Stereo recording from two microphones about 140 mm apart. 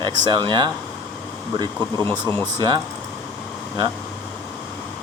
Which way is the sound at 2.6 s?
30° right (ahead or behind).